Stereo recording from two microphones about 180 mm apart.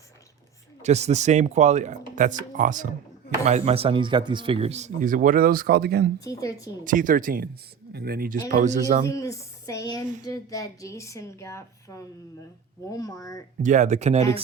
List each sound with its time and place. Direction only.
0.8 s speech: 40° right (ahead or behind)
3.4 s speech: 35° right (ahead or behind); by 6.1 s 60° right (ahead or behind)
6.1 s speech: 20° left (ahead or behind)
6.8 s speech: 45° right (ahead or behind)
9.0 s a woman's voice: 15° left (ahead or behind)
13.6 s speech: 45° right (ahead or behind)